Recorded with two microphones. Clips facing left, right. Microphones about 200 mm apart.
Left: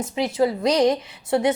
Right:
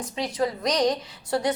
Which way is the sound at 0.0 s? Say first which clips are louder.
Left 5 dB; 25° left (ahead or behind).